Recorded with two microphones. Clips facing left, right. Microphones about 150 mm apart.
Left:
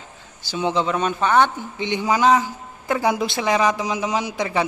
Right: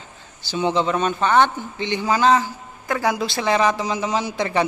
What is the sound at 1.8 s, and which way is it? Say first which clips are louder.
A man's voice: even; 15° left (ahead or behind).